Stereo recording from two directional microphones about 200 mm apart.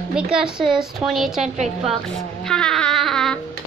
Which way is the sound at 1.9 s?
Centre (ahead or behind).